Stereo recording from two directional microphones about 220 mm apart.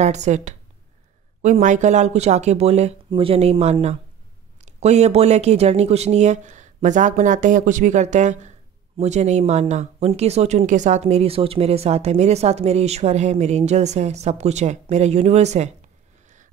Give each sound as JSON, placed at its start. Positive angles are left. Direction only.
{"t": 0.0, "sound": "speech", "side_deg": -30}